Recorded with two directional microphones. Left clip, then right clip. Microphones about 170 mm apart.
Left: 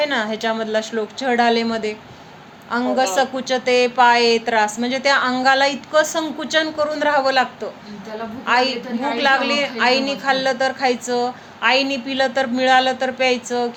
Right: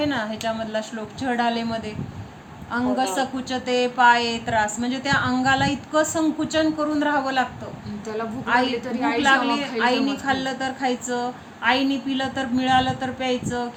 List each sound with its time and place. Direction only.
0.0 s a woman's voice: 35° left (ahead or behind)
8.4 s a woman's voice: 35° left (ahead or behind)